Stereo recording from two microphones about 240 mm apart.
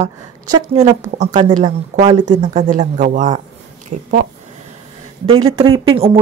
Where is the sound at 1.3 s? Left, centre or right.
Centre.